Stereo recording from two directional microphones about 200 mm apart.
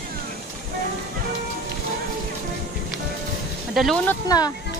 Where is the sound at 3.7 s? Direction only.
Centre (ahead or behind).